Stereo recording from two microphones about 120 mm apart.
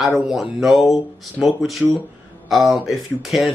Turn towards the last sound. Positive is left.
turn(degrees=0)  # may be behind; listen again after turning